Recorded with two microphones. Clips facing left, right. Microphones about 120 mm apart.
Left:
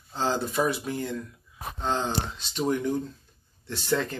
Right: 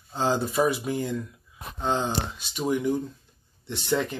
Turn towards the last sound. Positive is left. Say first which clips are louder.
# right 1 dB
turn(degrees=-15)  # may be behind; listen again after turning